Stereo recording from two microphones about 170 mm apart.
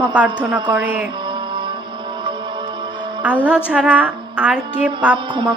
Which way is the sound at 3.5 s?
5° right (ahead or behind).